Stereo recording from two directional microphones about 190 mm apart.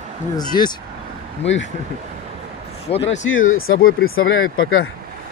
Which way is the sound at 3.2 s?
90° left.